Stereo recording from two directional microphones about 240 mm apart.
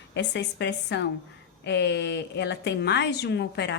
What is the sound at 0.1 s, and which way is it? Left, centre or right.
A woman's voice, left.